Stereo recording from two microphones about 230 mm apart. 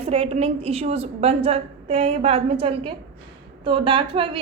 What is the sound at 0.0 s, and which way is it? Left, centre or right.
A woman's voice, right.